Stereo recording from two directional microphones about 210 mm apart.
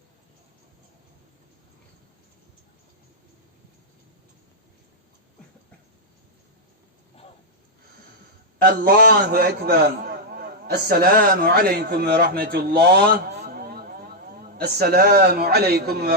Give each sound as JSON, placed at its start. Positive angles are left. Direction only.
{"t": 8.6, "sound": "a man's voice", "side_deg": -45}